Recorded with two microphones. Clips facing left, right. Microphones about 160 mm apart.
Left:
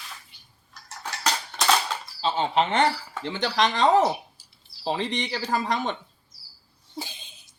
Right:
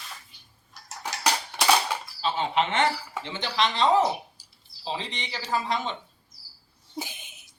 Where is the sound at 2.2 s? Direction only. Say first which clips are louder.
Left 2 dB; 30° left (ahead or behind).